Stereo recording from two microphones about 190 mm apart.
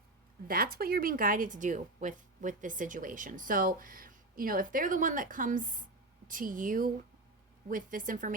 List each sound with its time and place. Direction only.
0.4 s a woman's voice: 50° right (ahead or behind)